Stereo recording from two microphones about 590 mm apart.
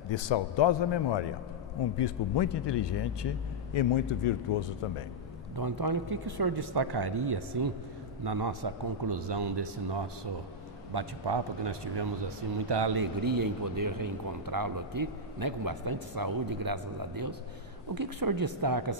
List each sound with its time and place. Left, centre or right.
0.1 s a man's voice: left
4.2 s speech: left
5.6 s speech: right